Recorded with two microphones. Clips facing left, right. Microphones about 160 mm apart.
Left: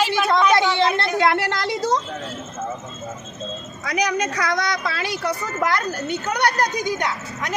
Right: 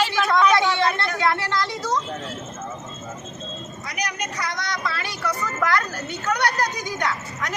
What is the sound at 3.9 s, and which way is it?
Speech, 90° left.